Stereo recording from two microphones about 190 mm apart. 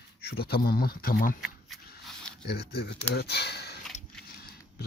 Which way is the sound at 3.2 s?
60° left (ahead or behind).